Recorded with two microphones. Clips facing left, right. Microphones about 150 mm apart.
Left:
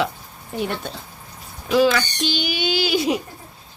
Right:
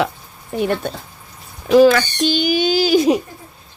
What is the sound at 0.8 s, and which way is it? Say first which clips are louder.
Speech: right 6 dB; 55° right (ahead or behind).